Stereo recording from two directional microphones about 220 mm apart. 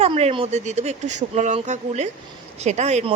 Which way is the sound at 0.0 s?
30° right (ahead or behind).